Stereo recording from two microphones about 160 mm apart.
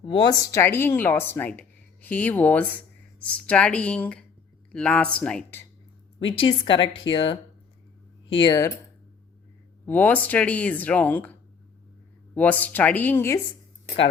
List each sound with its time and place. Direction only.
0.0 s speech: 30° left (ahead or behind); by 5.6 s 10° left (ahead or behind)
6.1 s speech: 35° left (ahead or behind)
8.4 s speech: 20° left (ahead or behind)
9.8 s speech: 10° left (ahead or behind)